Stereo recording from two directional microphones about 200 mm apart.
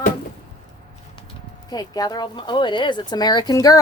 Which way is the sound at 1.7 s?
20° left (ahead or behind).